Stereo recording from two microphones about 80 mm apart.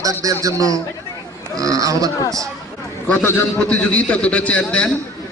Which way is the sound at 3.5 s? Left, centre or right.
Centre.